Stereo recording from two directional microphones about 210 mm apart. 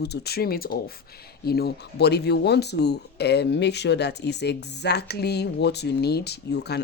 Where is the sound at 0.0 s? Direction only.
50° left (ahead or behind).